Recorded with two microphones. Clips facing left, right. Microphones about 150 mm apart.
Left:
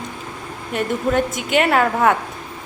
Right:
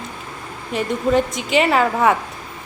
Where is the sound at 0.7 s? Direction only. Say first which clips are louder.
Right 1 dB; centre (ahead or behind).